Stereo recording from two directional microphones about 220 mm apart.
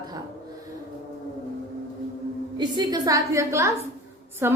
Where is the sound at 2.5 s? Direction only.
20° right (ahead or behind).